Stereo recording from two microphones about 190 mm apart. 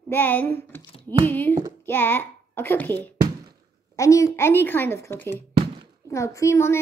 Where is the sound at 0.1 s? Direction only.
10° left (ahead or behind).